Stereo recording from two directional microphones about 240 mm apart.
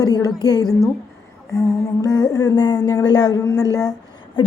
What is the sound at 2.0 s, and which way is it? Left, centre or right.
A woman's voice, centre.